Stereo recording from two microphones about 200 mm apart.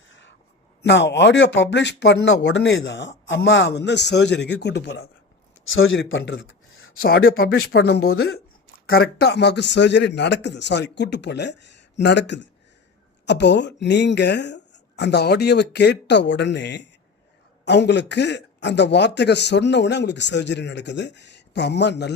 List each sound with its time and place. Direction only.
0.1 s a sound: 65° left (ahead or behind)
0.8 s speech: 60° left (ahead or behind)
5.6 s speech: 75° left (ahead or behind)
7.1 s speech: 45° left (ahead or behind)